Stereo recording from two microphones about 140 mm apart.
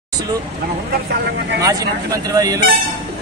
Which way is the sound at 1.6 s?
25° right (ahead or behind).